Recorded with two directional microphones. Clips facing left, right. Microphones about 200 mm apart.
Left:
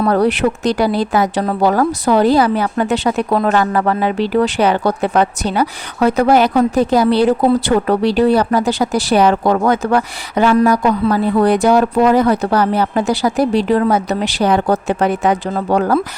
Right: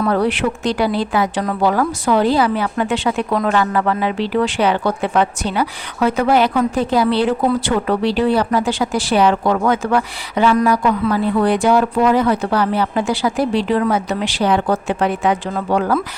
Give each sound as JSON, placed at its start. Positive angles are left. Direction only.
{"t": 0.0, "sound": "speech", "side_deg": 40}